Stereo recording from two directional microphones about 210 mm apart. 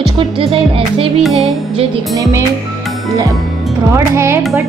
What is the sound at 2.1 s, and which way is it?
Speech, 15° right (ahead or behind).